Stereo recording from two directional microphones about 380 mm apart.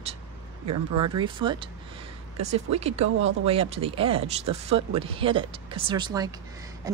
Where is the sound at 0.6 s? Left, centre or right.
Right.